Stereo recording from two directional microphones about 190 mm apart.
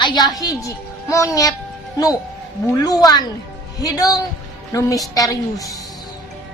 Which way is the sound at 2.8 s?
20° left (ahead or behind).